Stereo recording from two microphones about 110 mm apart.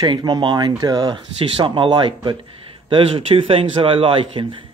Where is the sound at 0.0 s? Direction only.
40° right (ahead or behind).